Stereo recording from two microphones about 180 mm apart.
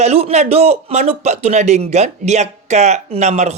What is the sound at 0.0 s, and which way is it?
A man's voice, 35° right (ahead or behind).